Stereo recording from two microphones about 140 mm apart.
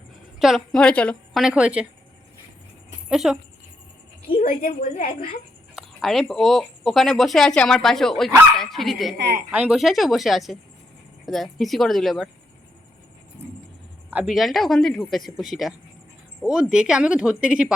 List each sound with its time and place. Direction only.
0.3 s a woman's voice: centre (ahead or behind)
1.4 s speech: 5° right (ahead or behind)
3.1 s speech: centre (ahead or behind)
4.4 s a woman's voice: 75° left (ahead or behind)
5.7 s speech: centre (ahead or behind)
14.1 s speech: 5° right (ahead or behind)